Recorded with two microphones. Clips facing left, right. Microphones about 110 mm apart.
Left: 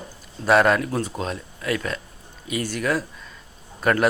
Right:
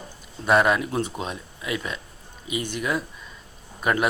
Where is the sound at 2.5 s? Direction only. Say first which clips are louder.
Left 2 dB; 45° left (ahead or behind).